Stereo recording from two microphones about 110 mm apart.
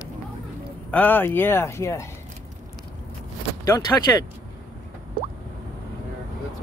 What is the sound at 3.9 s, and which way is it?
Speech, 15° left (ahead or behind).